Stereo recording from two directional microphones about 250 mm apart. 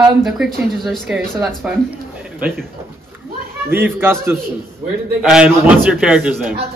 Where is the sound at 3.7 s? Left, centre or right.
Centre.